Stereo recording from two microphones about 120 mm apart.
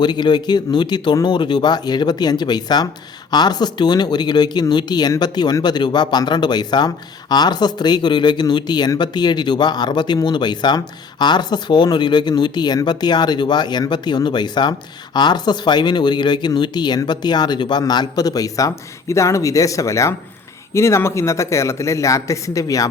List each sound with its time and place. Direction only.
0.0 s speech: 40° left (ahead or behind)